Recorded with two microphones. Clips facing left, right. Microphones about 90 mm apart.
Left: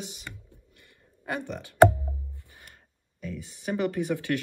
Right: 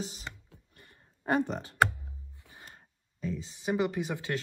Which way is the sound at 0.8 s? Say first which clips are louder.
Even; 35° right (ahead or behind).